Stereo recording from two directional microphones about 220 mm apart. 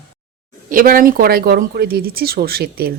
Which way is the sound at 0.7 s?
40° right (ahead or behind).